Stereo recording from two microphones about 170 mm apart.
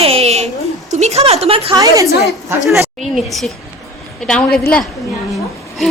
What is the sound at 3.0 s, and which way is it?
Speech, centre (ahead or behind).